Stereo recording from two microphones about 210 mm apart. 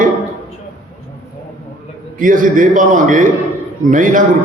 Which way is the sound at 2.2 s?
40° right (ahead or behind).